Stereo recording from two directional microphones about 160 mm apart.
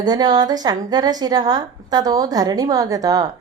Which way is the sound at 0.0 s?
25° right (ahead or behind).